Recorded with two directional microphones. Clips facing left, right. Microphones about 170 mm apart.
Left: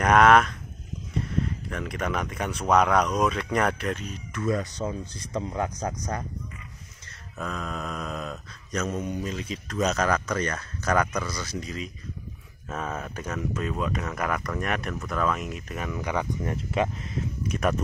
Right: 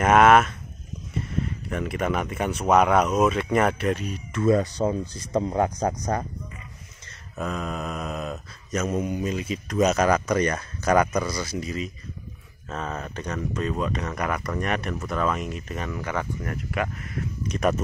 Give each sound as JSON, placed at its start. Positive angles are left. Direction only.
{"t": 0.0, "sound": "speech", "side_deg": -5}
{"t": 1.7, "sound": "speech", "side_deg": -5}
{"t": 2.6, "sound": "mantra", "side_deg": -10}
{"t": 4.3, "sound": "speech", "side_deg": -30}
{"t": 5.8, "sound": "speech", "side_deg": -55}
{"t": 7.3, "sound": "mantra", "side_deg": -5}
{"t": 12.6, "sound": "speech", "side_deg": 5}
{"t": 15.9, "sound": "speech", "side_deg": 15}
{"t": 17.5, "sound": "speech", "side_deg": 0}